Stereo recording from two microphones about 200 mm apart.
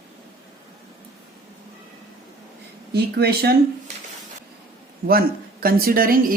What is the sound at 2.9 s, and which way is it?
Speech, 55° right (ahead or behind).